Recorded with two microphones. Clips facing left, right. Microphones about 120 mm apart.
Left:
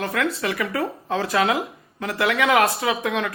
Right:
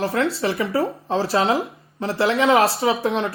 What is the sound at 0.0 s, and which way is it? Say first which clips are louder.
Speech: right 3 dB; 30° right (ahead or behind).